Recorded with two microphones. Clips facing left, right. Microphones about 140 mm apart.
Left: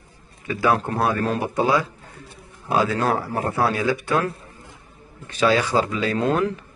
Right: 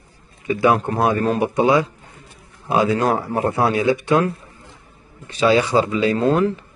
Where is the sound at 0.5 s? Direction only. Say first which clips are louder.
Right 4 dB; 15° right (ahead or behind).